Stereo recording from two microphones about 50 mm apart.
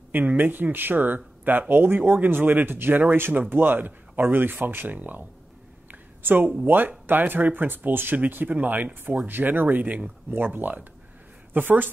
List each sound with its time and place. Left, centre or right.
0.1 s speech: right
5.9 s a sound: right
6.6 s speech: right